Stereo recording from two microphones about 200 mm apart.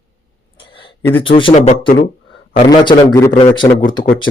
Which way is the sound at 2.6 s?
25° left (ahead or behind).